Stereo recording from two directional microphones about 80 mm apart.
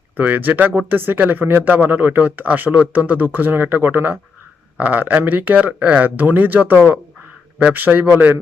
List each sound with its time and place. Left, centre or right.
0.2 s speech: right